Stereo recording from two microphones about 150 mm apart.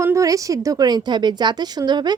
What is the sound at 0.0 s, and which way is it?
A woman's voice, 20° right (ahead or behind).